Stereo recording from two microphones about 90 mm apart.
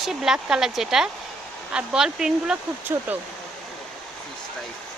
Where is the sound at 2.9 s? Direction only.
25° right (ahead or behind).